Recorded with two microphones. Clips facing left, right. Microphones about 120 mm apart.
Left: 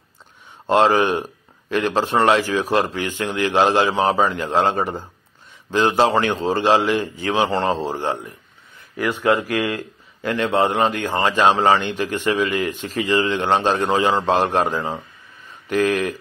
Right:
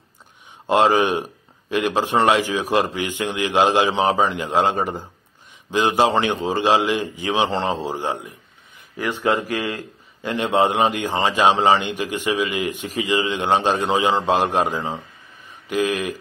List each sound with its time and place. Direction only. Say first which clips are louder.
0.7 s speech: left 1 dB; 15° right (ahead or behind)